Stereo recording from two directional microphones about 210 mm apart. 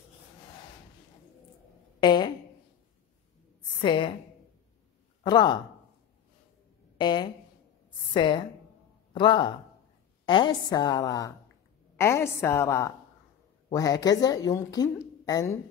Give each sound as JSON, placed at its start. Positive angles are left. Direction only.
{"t": 2.0, "sound": "a sound", "side_deg": 20}
{"t": 3.8, "sound": "a woman's voice", "side_deg": 25}
{"t": 5.2, "sound": "speech", "side_deg": 20}
{"t": 7.0, "sound": "a woman's voice", "side_deg": 20}